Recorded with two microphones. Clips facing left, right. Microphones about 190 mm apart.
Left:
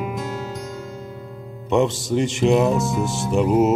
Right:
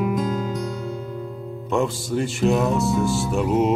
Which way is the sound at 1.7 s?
20° left (ahead or behind).